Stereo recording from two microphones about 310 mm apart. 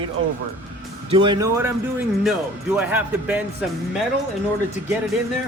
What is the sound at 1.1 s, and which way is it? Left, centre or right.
Speech, centre.